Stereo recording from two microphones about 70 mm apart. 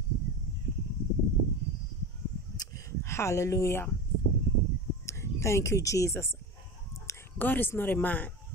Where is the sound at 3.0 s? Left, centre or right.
Left.